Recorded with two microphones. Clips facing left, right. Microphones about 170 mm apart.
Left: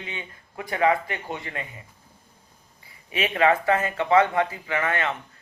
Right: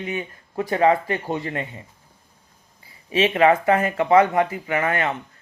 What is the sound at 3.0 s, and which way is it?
Speech, 30° right (ahead or behind).